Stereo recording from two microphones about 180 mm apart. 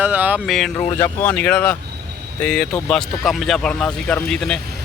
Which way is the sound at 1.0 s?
10° left (ahead or behind).